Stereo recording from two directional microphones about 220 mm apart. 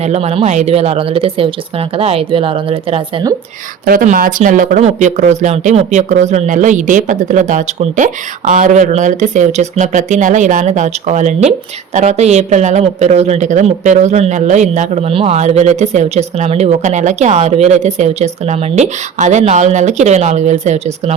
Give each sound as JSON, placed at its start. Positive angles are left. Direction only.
{"t": 0.0, "sound": "speech", "side_deg": -30}
{"t": 3.8, "sound": "speech", "side_deg": -40}